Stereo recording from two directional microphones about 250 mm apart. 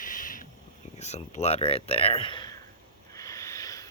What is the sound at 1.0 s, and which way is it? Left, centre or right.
Speech, left.